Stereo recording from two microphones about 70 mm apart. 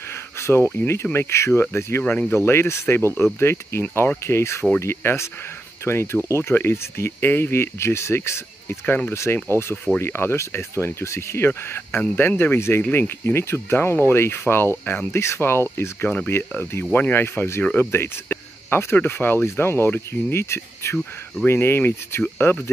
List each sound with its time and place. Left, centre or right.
0.1 s a sound: left
1.1 s speech: left
2.0 s speech: left
9.1 s speech: left